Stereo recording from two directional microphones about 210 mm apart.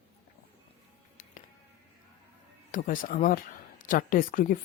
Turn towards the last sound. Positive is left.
turn(degrees=40)  # may be behind; listen again after turning